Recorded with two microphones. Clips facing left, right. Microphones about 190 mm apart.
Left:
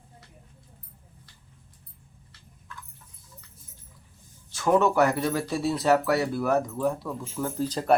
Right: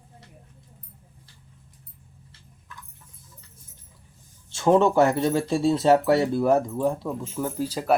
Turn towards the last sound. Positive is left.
turn(degrees=-10)  # may be behind; listen again after turning